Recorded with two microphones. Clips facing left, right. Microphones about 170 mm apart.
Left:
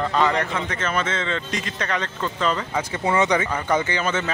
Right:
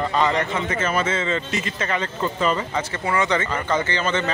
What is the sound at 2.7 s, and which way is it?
Speech, 10° left (ahead or behind).